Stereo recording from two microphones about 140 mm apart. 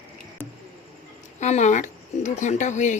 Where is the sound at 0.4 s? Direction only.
15° left (ahead or behind).